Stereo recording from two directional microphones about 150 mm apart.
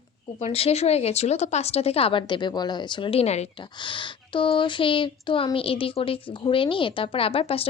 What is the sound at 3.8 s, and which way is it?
Speech, 35° left (ahead or behind).